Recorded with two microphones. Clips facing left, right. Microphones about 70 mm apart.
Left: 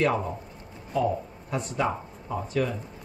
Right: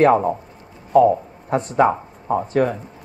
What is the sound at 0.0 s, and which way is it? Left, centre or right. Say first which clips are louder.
Speech: right 11 dB; right.